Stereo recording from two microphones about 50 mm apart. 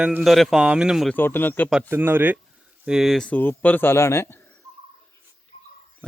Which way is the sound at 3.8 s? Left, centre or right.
Left.